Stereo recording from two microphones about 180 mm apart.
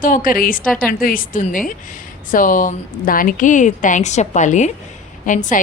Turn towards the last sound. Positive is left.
turn(degrees=45)  # may be behind; listen again after turning